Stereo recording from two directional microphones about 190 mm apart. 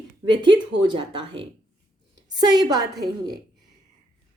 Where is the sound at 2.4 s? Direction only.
20° right (ahead or behind).